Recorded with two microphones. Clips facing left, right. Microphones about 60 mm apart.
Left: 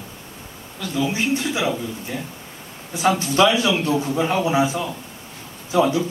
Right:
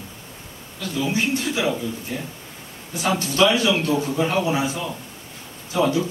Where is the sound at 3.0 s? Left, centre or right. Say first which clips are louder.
Left 2 dB; left.